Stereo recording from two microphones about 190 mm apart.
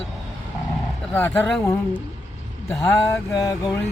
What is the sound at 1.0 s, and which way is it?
Speech, 10° left (ahead or behind).